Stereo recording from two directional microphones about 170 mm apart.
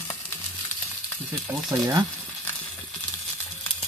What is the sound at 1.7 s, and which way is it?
Speech, 20° right (ahead or behind).